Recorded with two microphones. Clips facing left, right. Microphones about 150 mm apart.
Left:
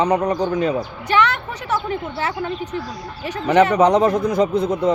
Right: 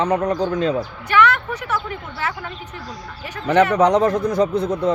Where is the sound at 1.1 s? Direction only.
30° left (ahead or behind).